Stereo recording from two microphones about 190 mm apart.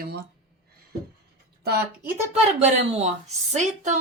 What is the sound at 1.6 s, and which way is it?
Speech, 60° right (ahead or behind).